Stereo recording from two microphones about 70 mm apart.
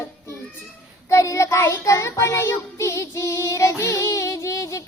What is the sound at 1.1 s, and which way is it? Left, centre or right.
Child singing, left.